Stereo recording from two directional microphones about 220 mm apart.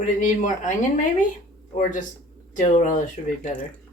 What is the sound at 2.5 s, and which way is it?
Speech, 35° left (ahead or behind).